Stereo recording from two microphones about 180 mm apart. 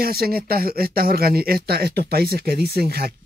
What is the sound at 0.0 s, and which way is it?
Speech, 55° right (ahead or behind).